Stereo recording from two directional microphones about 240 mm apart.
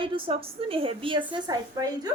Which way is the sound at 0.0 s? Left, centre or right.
Right.